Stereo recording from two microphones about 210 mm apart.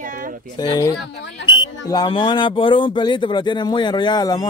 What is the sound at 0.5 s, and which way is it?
Speech, 20° left (ahead or behind).